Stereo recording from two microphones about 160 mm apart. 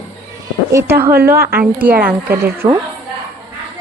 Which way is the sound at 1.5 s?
70° right (ahead or behind).